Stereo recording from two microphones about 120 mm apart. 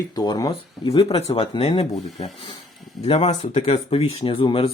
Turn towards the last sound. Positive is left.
turn(degrees=50)  # may be behind; listen again after turning